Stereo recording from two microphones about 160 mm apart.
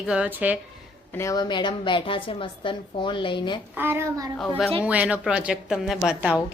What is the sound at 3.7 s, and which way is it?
Speech, 15° right (ahead or behind).